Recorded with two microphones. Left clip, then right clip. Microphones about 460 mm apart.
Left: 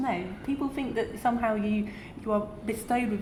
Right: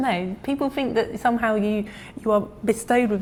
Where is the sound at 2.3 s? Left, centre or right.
Right.